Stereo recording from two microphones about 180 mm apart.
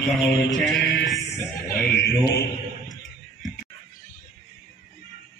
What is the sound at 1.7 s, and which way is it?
Speech, 60° left (ahead or behind).